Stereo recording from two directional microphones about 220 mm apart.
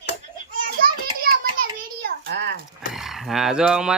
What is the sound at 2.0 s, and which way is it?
Speech, 45° right (ahead or behind).